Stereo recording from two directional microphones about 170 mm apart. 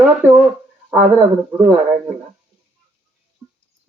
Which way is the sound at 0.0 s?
10° right (ahead or behind).